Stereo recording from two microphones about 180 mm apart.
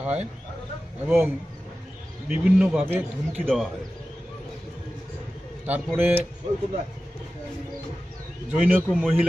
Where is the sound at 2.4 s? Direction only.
5° right (ahead or behind).